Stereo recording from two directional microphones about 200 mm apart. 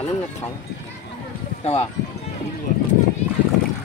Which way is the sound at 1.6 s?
30° left (ahead or behind).